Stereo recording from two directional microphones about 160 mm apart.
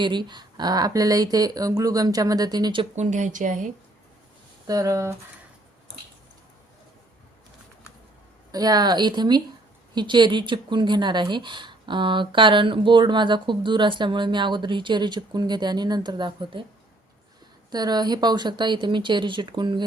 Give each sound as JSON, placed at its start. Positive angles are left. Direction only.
{"t": 0.0, "sound": "speech", "side_deg": -30}
{"t": 2.9, "sound": "speech", "side_deg": -45}
{"t": 4.6, "sound": "speech", "side_deg": -20}
{"t": 8.5, "sound": "speech", "side_deg": -25}
{"t": 17.7, "sound": "speech", "side_deg": -25}